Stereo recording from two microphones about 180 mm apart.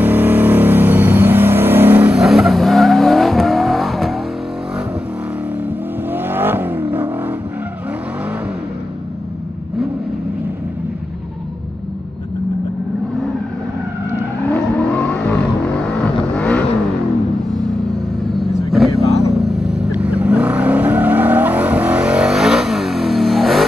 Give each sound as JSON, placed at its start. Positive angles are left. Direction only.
{"t": 0.0, "sound": "vehicle", "side_deg": -10}
{"t": 6.1, "sound": "vehicle", "side_deg": -10}
{"t": 14.5, "sound": "vehicle", "side_deg": 5}
{"t": 18.2, "sound": "vehicle", "side_deg": 0}
{"t": 19.0, "sound": "vehicle", "side_deg": 35}
{"t": 19.3, "sound": "vehicle", "side_deg": 0}